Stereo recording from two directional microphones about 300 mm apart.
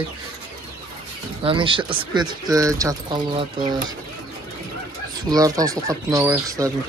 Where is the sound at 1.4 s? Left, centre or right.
Centre.